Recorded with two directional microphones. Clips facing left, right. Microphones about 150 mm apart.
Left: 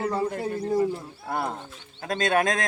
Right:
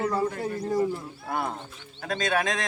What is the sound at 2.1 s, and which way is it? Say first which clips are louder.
Speech: left 3 dB; 50° left (ahead or behind).